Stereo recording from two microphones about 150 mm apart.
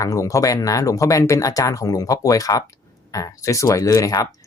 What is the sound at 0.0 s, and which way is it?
Speech, 20° left (ahead or behind).